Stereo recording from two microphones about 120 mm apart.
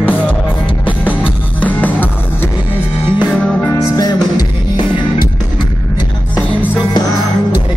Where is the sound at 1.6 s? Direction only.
15° left (ahead or behind).